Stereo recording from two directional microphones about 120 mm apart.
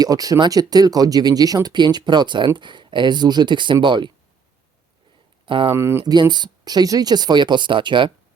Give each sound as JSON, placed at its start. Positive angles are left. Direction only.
{"t": 0.0, "sound": "speech", "side_deg": -30}
{"t": 5.5, "sound": "speech", "side_deg": -45}
{"t": 5.7, "sound": "speech", "side_deg": -20}
{"t": 6.1, "sound": "speech", "side_deg": -35}